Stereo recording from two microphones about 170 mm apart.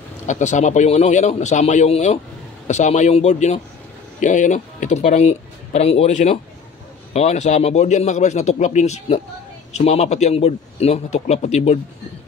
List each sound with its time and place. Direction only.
0.3 s a man's voice: 45° left (ahead or behind)